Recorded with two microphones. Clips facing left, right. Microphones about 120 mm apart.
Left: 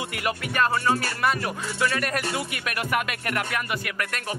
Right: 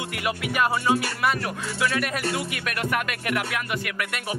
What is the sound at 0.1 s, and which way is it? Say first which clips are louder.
Music: right 1 dB; centre (ahead or behind).